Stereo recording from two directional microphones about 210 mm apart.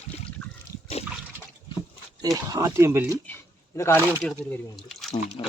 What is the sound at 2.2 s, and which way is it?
Speech, 15° right (ahead or behind).